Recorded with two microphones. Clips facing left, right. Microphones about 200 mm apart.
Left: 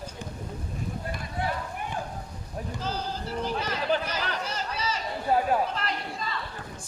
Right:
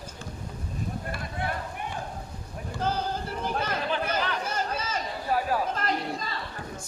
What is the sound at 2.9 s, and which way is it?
Music, 55° right (ahead or behind).